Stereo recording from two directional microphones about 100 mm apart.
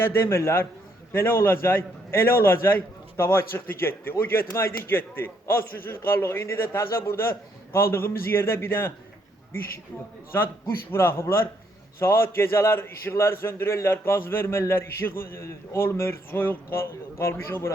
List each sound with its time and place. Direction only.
0.0 s a man's voice: 25° left (ahead or behind)
10.9 s a man's voice: 25° left (ahead or behind)